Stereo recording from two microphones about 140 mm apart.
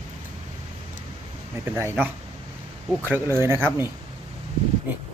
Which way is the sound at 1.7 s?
15° right (ahead or behind).